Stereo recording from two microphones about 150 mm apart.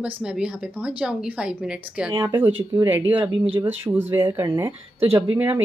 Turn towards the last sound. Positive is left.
turn(degrees=-15)  # may be behind; listen again after turning